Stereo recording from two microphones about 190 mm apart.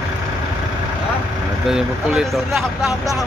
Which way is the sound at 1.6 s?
Centre (ahead or behind).